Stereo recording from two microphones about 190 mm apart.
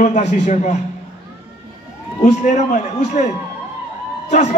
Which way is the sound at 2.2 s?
40° left (ahead or behind).